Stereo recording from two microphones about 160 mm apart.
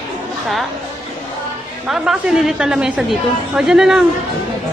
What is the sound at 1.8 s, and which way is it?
A woman's voice, 5° right (ahead or behind).